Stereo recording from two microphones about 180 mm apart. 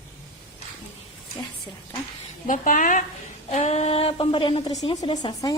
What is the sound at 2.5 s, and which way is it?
A woman's voice, 45° left (ahead or behind).